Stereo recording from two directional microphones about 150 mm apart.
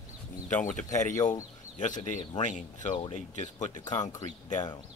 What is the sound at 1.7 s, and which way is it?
Speech, 55° left (ahead or behind).